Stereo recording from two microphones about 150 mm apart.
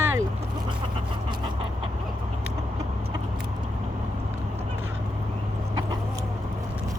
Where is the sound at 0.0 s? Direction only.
15° right (ahead or behind).